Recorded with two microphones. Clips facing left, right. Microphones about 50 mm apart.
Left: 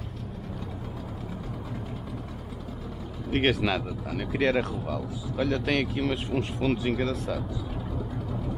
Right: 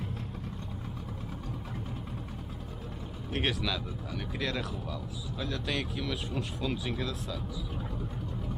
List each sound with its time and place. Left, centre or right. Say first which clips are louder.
3.3 s speech: left 7 dB; left